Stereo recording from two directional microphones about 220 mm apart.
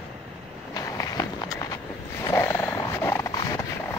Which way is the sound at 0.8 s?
15° left (ahead or behind).